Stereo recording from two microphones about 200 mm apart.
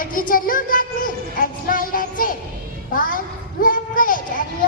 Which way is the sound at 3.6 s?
45° left (ahead or behind).